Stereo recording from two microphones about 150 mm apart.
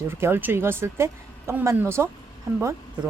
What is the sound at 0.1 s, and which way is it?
Speech, 15° right (ahead or behind).